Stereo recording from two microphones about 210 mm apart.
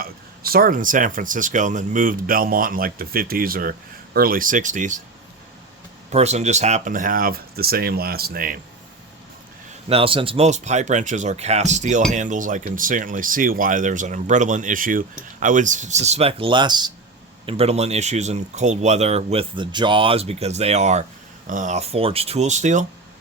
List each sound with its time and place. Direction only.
0.5 s speech: 40° right (ahead or behind)
6.1 s speech: 30° right (ahead or behind)
9.9 s speech: 25° right (ahead or behind)